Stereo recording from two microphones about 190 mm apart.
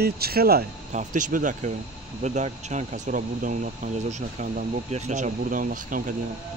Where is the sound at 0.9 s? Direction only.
40° right (ahead or behind).